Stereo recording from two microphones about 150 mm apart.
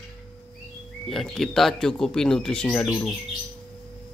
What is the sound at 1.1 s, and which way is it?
Speech, centre (ahead or behind).